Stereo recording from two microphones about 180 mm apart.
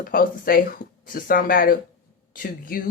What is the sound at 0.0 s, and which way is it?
A man's voice, 55° left (ahead or behind).